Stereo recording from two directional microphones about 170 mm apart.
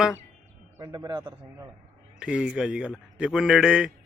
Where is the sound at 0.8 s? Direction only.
25° right (ahead or behind).